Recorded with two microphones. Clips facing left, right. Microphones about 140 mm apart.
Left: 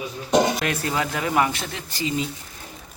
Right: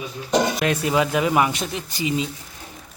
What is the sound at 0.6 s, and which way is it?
Speech, 15° right (ahead or behind).